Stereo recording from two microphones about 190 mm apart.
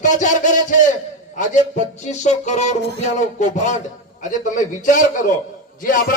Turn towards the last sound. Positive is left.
turn(degrees=45)  # may be behind; listen again after turning